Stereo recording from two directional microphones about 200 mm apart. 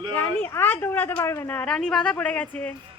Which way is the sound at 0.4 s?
10° left (ahead or behind).